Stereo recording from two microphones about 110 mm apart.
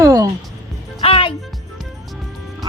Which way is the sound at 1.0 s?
55° left (ahead or behind).